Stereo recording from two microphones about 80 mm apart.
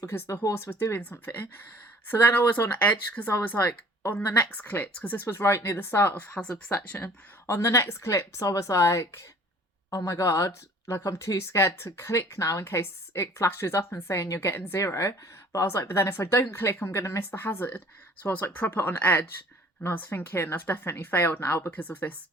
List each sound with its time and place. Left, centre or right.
0.0 s speech: left
0.9 s speech: left
5.2 s speech: left
7.4 s speech: left